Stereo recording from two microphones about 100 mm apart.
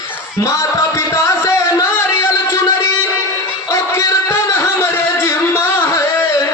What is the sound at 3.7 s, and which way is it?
Music, 30° left (ahead or behind).